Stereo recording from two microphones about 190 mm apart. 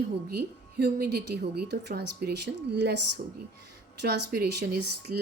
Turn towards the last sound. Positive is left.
turn(degrees=-55)  # may be behind; listen again after turning